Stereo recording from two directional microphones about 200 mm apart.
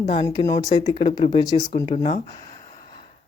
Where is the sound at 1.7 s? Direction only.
30° left (ahead or behind).